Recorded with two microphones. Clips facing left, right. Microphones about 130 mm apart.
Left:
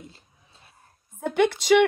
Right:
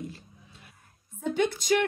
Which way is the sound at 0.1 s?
30° left (ahead or behind).